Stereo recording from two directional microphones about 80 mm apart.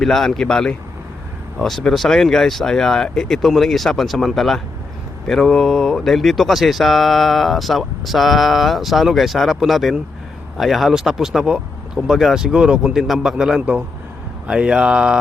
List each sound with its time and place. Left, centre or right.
0.0 s speech: centre